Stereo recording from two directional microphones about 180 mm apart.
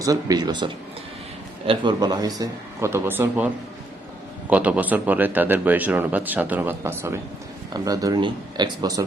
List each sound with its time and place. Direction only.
0.0 s a man's voice: 20° right (ahead or behind)